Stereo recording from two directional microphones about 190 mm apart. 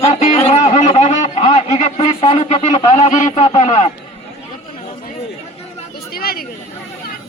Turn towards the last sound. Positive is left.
turn(degrees=55)  # may be behind; listen again after turning